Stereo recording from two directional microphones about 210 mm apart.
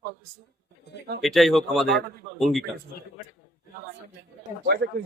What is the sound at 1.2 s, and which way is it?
Speech, centre (ahead or behind).